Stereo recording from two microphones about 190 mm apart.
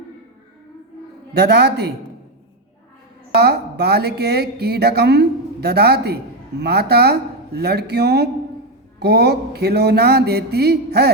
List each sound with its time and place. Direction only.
1.3 s speech: 60° right (ahead or behind)
3.3 s speech: 60° right (ahead or behind)